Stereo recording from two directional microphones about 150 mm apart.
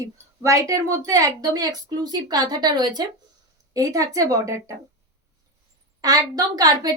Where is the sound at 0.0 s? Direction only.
20° right (ahead or behind).